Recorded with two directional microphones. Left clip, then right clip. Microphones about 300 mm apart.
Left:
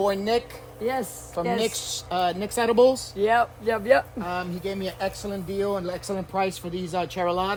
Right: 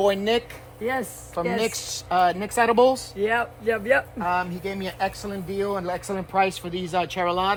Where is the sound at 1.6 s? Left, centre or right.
Centre.